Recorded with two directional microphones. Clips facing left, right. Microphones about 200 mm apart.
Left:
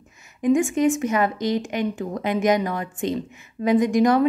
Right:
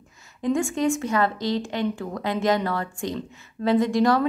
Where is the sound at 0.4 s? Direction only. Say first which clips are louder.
Left 4 dB; 15° left (ahead or behind).